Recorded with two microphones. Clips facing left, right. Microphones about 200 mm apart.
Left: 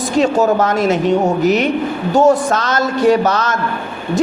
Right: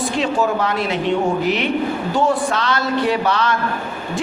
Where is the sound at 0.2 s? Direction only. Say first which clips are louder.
Left 7 dB; 45° left (ahead or behind).